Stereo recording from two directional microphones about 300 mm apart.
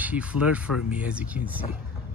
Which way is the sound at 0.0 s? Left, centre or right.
Centre.